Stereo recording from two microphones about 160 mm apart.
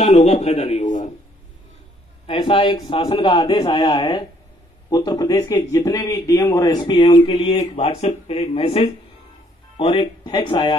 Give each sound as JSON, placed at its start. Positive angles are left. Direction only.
{"t": 0.0, "sound": "a man's voice", "side_deg": 40}
{"t": 2.2, "sound": "a man's voice", "side_deg": 30}